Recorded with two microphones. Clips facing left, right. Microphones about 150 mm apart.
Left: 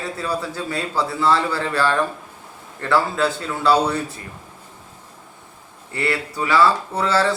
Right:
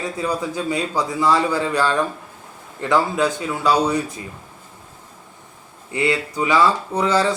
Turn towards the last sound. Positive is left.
turn(degrees=-15)  # may be behind; listen again after turning